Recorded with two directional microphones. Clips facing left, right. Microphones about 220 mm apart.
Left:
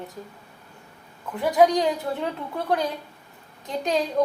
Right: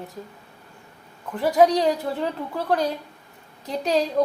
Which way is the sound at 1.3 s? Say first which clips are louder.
Right 1 dB; centre (ahead or behind).